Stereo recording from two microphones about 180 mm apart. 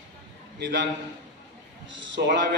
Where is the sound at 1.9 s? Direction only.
85° right.